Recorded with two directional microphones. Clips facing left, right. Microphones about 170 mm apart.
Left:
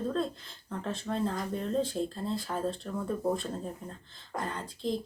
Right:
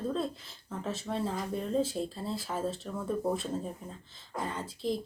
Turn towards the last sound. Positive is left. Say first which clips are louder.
# right 1 dB
turn(degrees=-5)  # may be behind; listen again after turning